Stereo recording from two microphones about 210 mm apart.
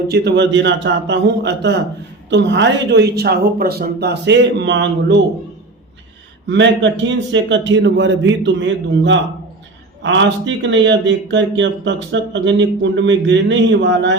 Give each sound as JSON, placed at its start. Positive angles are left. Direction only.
{"t": 0.1, "sound": "speech", "side_deg": -55}
{"t": 6.5, "sound": "speech", "side_deg": -55}